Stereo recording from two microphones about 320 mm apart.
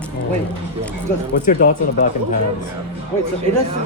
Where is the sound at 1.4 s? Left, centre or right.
Left.